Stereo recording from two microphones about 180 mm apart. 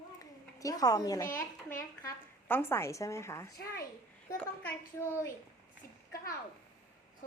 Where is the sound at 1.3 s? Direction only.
45° left (ahead or behind).